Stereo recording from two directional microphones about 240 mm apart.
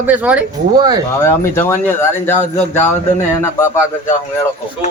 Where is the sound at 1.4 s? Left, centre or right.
Centre.